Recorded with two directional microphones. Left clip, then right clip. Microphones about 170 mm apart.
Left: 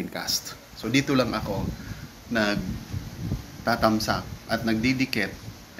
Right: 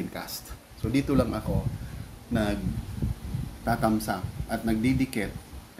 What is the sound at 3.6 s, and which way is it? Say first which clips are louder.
Speech: left 4 dB; 15° right (ahead or behind).